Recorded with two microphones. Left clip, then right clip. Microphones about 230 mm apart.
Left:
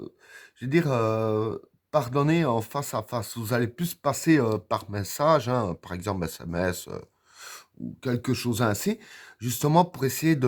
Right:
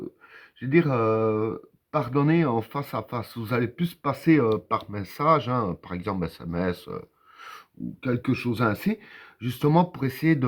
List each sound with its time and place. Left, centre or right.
0.7 s speech: left